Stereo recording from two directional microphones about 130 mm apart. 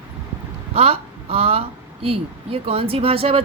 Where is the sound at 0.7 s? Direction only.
50° right (ahead or behind).